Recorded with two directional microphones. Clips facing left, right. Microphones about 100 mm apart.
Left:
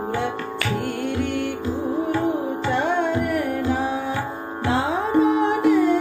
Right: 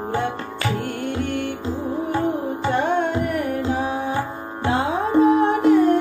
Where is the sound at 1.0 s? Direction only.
50° right (ahead or behind).